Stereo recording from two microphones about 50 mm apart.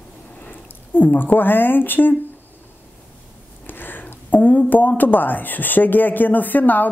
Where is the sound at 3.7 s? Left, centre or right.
Left.